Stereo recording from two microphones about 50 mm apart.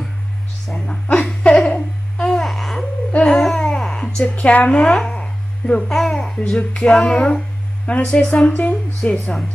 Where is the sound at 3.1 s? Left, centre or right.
Left.